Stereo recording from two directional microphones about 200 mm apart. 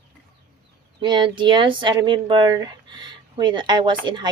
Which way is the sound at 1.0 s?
25° right (ahead or behind).